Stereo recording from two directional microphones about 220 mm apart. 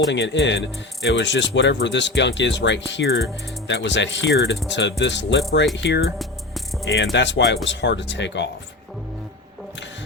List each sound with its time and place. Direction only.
0.1 s speech: 55° left (ahead or behind)